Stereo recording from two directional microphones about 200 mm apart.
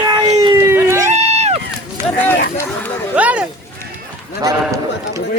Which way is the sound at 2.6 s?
10° left (ahead or behind).